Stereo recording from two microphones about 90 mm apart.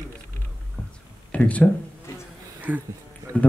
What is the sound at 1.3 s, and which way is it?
Speech, 15° left (ahead or behind).